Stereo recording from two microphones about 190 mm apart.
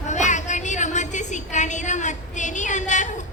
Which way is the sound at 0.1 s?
40° left (ahead or behind).